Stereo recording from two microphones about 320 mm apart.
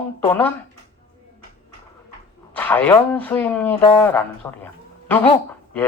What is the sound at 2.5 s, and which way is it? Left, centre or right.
Speech, centre.